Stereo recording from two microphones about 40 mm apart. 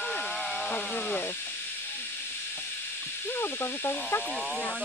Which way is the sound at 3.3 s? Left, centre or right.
Left.